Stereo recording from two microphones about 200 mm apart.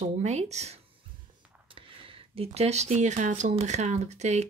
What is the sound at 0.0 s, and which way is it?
Speech, 35° right (ahead or behind).